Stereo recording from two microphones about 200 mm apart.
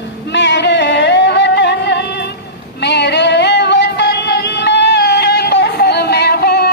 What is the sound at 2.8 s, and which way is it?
Music, 60° left (ahead or behind).